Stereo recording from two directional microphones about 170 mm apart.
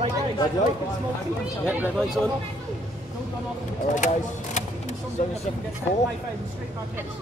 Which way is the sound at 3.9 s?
45° left (ahead or behind).